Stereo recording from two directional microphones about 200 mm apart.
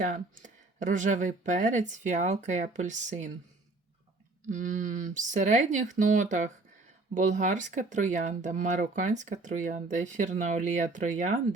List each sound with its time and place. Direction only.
0.0 s speech: 40° right (ahead or behind)
4.4 s speech: 40° right (ahead or behind)